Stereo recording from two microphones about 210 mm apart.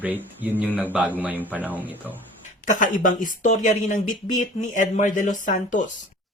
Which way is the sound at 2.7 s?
40° left (ahead or behind).